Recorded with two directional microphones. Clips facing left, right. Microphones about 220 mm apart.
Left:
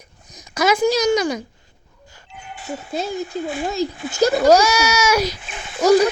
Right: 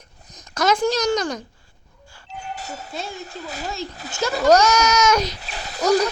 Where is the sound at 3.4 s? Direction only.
40° right (ahead or behind).